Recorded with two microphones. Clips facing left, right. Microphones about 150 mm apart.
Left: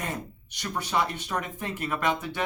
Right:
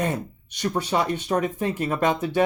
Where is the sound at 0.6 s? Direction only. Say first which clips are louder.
Right 5 dB; 25° right (ahead or behind).